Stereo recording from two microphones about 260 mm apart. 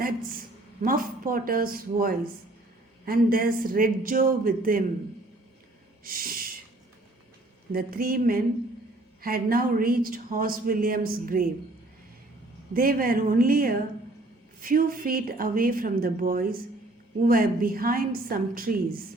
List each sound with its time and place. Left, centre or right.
0.0 s a woman's voice: right
6.1 s snort: right
7.7 s a woman's voice: right
12.7 s a woman's voice: right